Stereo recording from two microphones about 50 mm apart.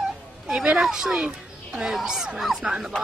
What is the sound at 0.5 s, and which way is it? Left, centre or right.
Speech, centre.